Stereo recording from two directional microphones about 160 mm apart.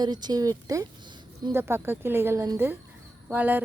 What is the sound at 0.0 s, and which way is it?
A woman's voice, 25° right (ahead or behind).